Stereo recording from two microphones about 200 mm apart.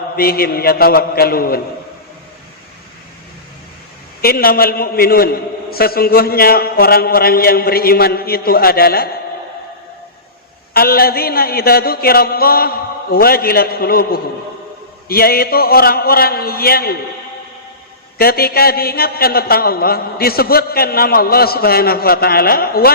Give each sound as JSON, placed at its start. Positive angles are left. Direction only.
{"t": 0.2, "sound": "a man's voice", "side_deg": 50}
{"t": 4.2, "sound": "a man's voice", "side_deg": 50}
{"t": 10.8, "sound": "a man's voice", "side_deg": 50}
{"t": 18.2, "sound": "a man's voice", "side_deg": 50}